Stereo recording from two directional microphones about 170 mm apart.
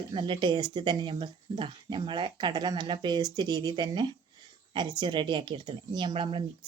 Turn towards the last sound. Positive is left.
turn(degrees=-30)  # may be behind; listen again after turning